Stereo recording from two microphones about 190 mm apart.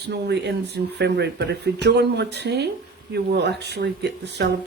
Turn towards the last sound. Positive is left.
turn(degrees=-60)  # may be behind; listen again after turning